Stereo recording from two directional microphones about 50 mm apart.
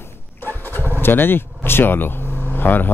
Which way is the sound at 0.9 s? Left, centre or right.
Left.